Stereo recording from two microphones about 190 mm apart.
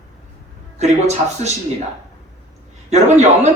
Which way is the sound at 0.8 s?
35° right (ahead or behind).